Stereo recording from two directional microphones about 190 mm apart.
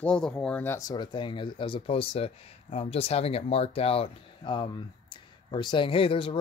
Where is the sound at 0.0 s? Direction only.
5° left (ahead or behind).